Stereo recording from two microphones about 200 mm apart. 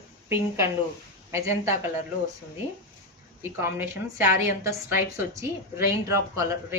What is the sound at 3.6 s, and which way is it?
Speech, 10° right (ahead or behind).